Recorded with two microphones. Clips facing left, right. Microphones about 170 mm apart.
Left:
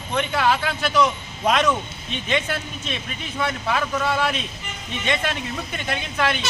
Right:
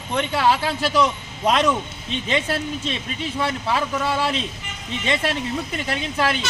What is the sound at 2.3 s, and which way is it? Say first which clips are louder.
Speech: right 2 dB; 30° right (ahead or behind).